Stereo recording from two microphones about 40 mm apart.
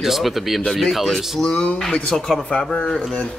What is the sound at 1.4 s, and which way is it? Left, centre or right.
Speech, left.